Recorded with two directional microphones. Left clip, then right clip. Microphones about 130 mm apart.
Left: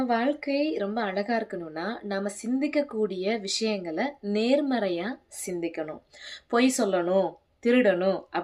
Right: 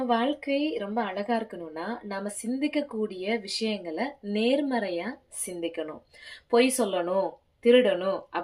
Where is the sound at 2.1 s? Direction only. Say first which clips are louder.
Left 4 dB; 20° left (ahead or behind).